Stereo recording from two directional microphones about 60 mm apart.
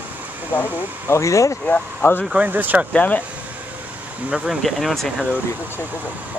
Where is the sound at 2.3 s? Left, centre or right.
Right.